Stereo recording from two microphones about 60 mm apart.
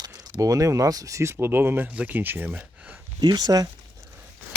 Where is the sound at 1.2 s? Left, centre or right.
Right.